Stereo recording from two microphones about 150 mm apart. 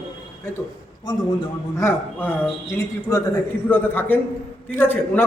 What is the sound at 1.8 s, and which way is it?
A man's voice, 15° left (ahead or behind).